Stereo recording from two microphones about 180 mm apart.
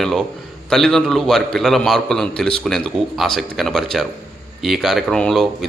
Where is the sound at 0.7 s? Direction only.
Centre (ahead or behind).